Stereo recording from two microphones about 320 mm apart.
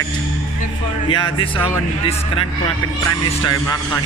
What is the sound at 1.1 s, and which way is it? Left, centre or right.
Speech, centre.